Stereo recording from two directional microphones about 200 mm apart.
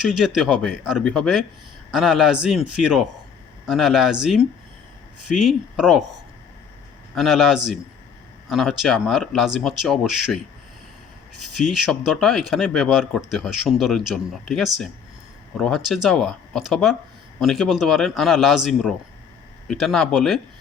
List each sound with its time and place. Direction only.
0.0 s speech: centre (ahead or behind)
7.2 s speech: centre (ahead or behind)